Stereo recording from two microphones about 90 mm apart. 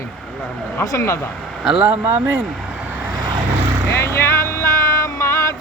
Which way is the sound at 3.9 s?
30° left (ahead or behind).